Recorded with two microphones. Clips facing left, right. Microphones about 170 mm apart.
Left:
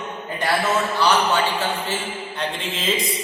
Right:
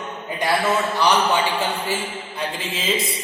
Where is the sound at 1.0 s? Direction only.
15° right (ahead or behind).